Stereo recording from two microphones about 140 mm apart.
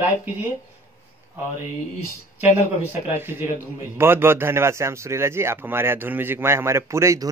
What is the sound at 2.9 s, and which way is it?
A man's voice, 15° right (ahead or behind).